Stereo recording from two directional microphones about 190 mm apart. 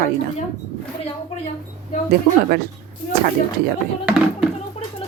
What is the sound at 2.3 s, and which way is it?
Speech, 40° right (ahead or behind).